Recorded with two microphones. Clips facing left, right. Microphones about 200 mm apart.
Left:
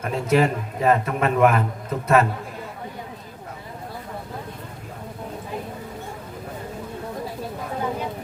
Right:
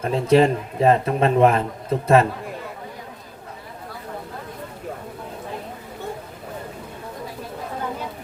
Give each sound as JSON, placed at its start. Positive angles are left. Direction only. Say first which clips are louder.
{"t": 0.0, "sound": "a man's voice", "louder": "right 4 dB", "side_deg": -30}